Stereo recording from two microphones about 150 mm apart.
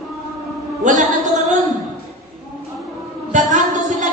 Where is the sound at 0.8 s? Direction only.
55° right (ahead or behind).